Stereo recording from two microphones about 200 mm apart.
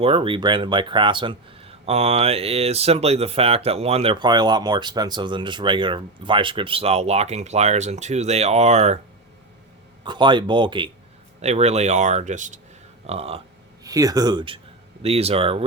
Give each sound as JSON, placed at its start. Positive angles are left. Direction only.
{"t": 0.0, "sound": "speech", "side_deg": -25}
{"t": 10.0, "sound": "speech", "side_deg": -20}
{"t": 13.8, "sound": "speech", "side_deg": -15}